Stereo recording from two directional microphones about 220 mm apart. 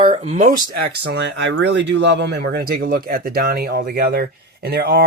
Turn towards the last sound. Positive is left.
turn(degrees=-45)  # may be behind; listen again after turning